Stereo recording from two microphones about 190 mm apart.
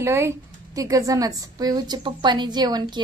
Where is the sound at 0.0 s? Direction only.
15° right (ahead or behind).